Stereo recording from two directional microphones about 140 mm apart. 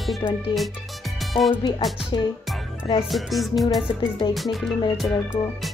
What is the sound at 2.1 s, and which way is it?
Music, 35° left (ahead or behind).